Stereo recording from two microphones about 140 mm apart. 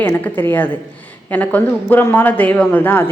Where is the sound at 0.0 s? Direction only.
15° left (ahead or behind).